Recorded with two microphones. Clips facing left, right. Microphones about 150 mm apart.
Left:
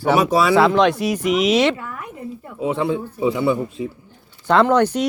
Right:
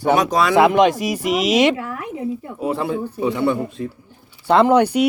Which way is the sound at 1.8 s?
90° right.